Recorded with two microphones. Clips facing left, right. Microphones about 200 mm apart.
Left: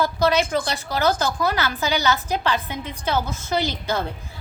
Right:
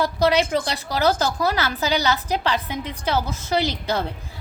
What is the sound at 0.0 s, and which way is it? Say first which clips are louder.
A woman's voice: right 1 dB; 30° right (ahead or behind).